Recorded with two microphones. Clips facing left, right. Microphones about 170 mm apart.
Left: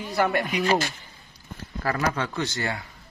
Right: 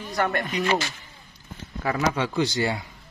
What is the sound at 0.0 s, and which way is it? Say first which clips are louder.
Speech: left 2 dB; 10° left (ahead or behind).